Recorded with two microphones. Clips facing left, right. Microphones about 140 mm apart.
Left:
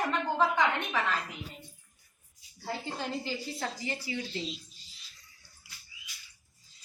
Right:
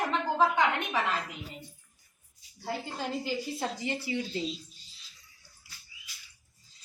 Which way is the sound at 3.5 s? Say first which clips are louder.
Right 3 dB; 20° right (ahead or behind).